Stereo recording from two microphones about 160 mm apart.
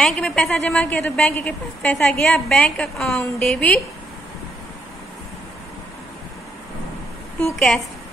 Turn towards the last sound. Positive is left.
turn(degrees=5)  # may be behind; listen again after turning